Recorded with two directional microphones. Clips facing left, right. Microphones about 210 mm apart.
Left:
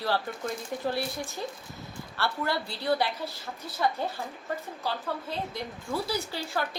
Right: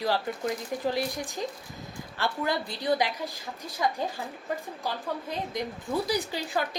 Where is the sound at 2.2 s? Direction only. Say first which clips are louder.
Right 1 dB; 15° right (ahead or behind).